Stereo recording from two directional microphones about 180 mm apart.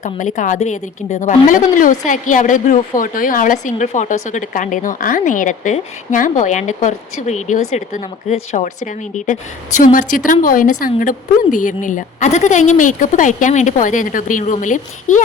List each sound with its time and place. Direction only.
0.0 s a woman's voice: 45° left (ahead or behind)